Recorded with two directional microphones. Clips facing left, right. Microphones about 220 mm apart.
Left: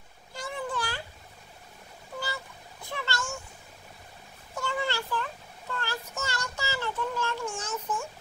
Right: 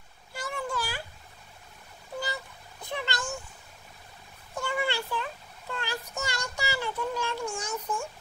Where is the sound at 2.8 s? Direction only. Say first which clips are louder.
Right 1 dB; 20° right (ahead or behind).